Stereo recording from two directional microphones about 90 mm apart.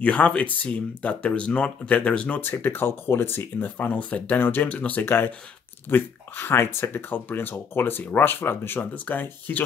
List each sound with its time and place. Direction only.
0.0 s speech: 15° left (ahead or behind)